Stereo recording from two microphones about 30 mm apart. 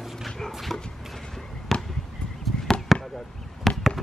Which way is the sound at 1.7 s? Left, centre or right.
Centre.